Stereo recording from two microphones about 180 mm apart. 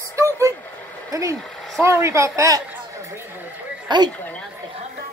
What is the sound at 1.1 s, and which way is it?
A woman's voice, 15° right (ahead or behind).